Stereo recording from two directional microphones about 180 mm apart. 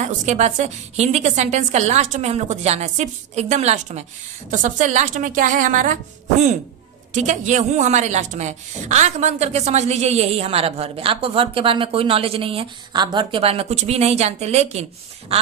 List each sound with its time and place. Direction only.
0.0 s a woman's voice: 40° right (ahead or behind)
7.1 s speech: 45° right (ahead or behind)